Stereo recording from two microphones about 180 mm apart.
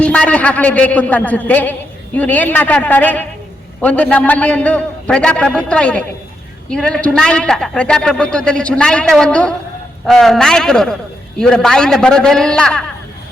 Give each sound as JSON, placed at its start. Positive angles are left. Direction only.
{"t": 0.0, "sound": "a man's voice", "side_deg": 5}